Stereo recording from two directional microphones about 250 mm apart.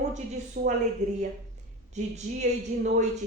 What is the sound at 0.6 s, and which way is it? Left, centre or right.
Speech, right.